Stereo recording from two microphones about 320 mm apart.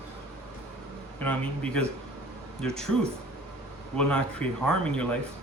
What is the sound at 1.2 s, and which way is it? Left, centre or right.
Speech, centre.